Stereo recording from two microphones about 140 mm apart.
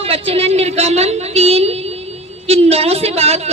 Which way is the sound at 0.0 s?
45° right (ahead or behind).